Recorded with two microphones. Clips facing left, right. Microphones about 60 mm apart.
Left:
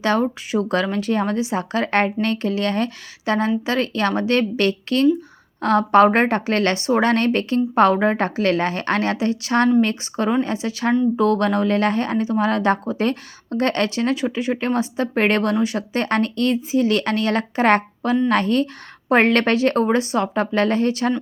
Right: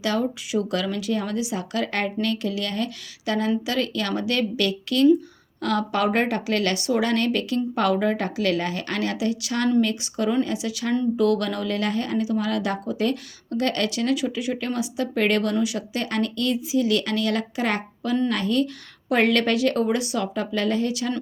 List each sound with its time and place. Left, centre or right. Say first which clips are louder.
0.0 s speech: left 5 dB; left